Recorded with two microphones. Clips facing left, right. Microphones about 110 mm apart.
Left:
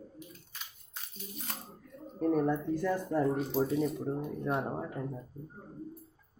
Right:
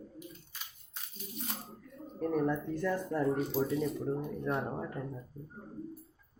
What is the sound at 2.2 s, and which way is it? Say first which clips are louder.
Speech: left 3 dB; 10° left (ahead or behind).